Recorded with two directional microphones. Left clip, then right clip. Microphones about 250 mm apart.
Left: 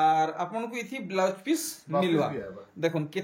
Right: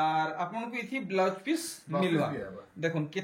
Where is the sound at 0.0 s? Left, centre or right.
Centre.